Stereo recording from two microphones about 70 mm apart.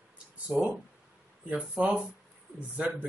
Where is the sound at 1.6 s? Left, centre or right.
Centre.